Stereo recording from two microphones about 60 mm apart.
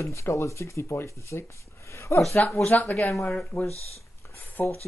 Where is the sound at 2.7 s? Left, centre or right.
Left.